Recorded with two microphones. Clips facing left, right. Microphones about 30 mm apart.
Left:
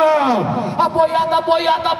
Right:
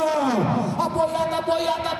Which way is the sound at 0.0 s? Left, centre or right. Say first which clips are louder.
Left 7 dB; left.